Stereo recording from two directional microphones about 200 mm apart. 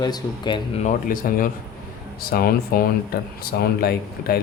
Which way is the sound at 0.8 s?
40° left (ahead or behind).